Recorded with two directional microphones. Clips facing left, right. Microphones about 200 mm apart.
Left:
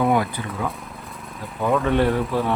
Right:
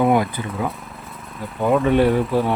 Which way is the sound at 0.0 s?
15° right (ahead or behind).